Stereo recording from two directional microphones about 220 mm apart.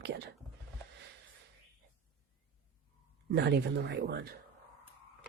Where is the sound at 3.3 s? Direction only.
50° right (ahead or behind).